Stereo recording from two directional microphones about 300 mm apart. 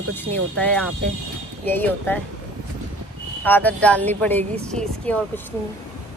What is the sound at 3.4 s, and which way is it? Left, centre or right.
A woman's voice, centre.